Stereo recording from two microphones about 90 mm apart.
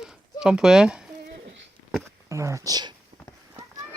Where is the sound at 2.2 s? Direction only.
35° right (ahead or behind).